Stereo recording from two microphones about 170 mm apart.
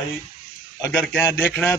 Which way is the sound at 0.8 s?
10° left (ahead or behind).